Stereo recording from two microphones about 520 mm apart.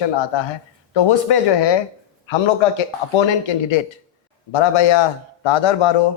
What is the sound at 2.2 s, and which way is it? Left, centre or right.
Speech, left.